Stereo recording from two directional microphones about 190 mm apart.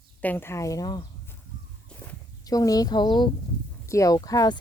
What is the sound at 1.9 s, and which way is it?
Walk, 5° left (ahead or behind).